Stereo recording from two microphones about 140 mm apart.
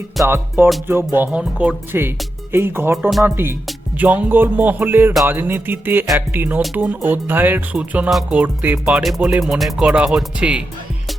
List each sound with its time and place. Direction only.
0.3 s speech: 15° right (ahead or behind)